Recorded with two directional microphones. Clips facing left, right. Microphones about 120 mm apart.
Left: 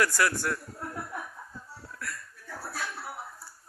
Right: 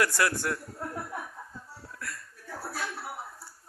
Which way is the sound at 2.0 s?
20° right (ahead or behind).